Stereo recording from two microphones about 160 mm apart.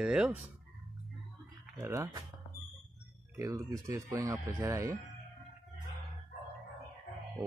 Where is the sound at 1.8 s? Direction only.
15° right (ahead or behind).